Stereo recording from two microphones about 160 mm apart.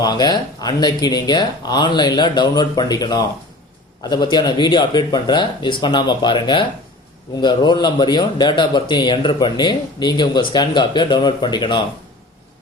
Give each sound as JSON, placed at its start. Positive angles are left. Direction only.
{"t": 0.0, "sound": "a man's voice", "side_deg": 25}